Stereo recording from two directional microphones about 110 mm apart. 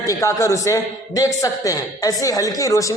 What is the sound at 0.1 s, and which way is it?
A man's voice, 30° left (ahead or behind).